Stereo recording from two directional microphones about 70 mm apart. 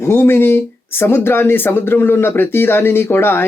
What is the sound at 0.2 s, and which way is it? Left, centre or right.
Speech, left.